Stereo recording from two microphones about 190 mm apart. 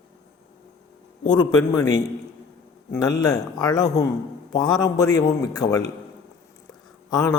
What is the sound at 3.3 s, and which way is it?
A man's voice, 20° left (ahead or behind).